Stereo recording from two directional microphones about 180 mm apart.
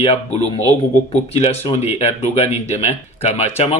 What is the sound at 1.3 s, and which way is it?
A man's voice, 35° left (ahead or behind).